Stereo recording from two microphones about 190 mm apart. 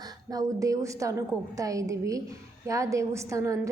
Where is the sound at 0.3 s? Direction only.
15° right (ahead or behind).